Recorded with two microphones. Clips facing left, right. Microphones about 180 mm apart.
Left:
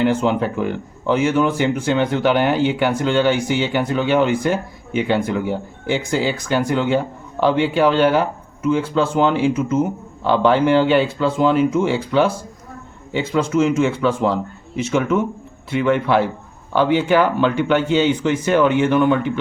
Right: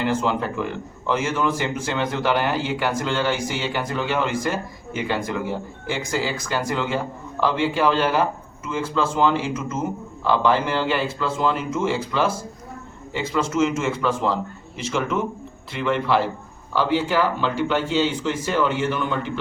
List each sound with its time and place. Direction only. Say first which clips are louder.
0.0 s speech: left 5 dB; 65° left (ahead or behind)